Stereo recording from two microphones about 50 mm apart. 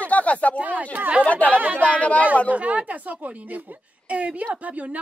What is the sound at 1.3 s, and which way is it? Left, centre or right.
Speech, left.